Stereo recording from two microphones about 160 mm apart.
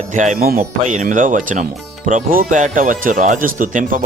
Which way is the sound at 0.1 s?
50° right (ahead or behind).